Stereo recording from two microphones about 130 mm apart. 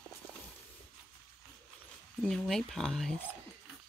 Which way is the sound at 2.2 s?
5° left (ahead or behind).